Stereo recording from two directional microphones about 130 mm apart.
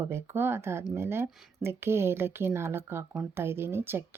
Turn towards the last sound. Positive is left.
turn(degrees=-15)  # may be behind; listen again after turning